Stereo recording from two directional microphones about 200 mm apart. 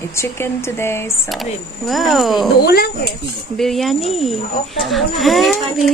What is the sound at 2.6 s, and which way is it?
Speech, 50° left (ahead or behind).